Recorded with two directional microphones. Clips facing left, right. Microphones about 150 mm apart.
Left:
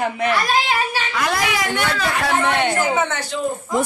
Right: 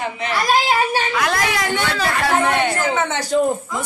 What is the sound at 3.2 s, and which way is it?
Speech, 50° right (ahead or behind).